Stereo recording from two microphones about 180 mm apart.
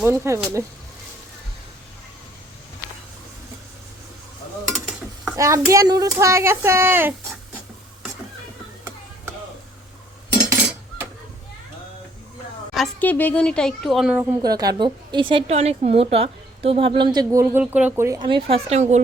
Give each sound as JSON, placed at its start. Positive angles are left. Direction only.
{"t": 0.0, "sound": "speech", "side_deg": -10}
{"t": 4.7, "sound": "stir", "side_deg": 0}
{"t": 5.4, "sound": "speech", "side_deg": -15}
{"t": 12.7, "sound": "speech", "side_deg": 5}
{"t": 14.4, "sound": "speech", "side_deg": -20}
{"t": 17.6, "sound": "speech", "side_deg": -10}